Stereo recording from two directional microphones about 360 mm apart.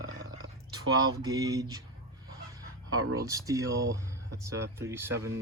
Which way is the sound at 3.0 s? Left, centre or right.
Right.